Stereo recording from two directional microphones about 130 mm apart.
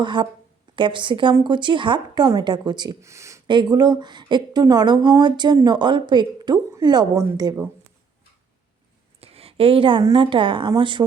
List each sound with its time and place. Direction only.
0.0 s speech: 35° right (ahead or behind)
3.0 s speech: 25° right (ahead or behind)
3.4 s speech: 35° right (ahead or behind)
9.2 s a sound: 50° right (ahead or behind)
10.0 s a woman's voice: 30° right (ahead or behind)
10.2 s speech: 40° right (ahead or behind)